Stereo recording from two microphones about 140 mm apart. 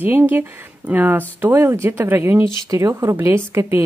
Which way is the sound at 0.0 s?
15° right (ahead or behind).